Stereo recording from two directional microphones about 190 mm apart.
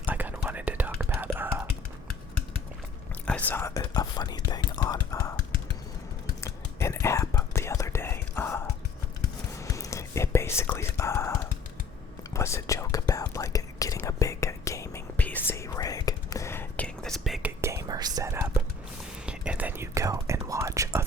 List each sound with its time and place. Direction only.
0.0 s whispering: 10° right (ahead or behind)
3.2 s whispering: 10° left (ahead or behind)
6.4 s whispering: 15° left (ahead or behind)
9.6 s whispering: 15° left (ahead or behind); by 17.5 s centre (ahead or behind)
17.6 s whispering: 15° right (ahead or behind)